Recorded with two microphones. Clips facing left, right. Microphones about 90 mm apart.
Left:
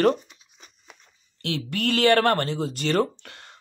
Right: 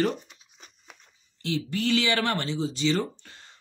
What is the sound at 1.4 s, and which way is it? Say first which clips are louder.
Speech: left 1 dB; 60° left (ahead or behind).